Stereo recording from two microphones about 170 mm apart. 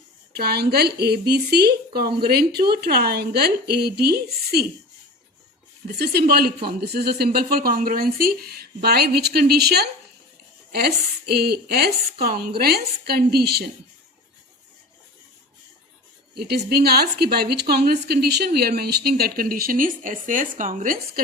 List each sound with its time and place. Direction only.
0.3 s a woman's voice: 70° right (ahead or behind)
5.9 s a woman's voice: 65° right (ahead or behind)
16.3 s a woman's voice: 70° right (ahead or behind); by 21.0 s 55° right (ahead or behind)